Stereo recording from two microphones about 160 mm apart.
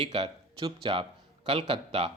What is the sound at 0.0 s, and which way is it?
A man's voice, 40° right (ahead or behind).